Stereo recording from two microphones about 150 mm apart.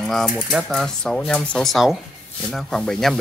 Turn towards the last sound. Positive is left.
turn(degrees=5)  # may be behind; listen again after turning